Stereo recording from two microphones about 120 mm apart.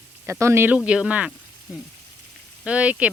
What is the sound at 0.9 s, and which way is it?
Speech, 10° right (ahead or behind).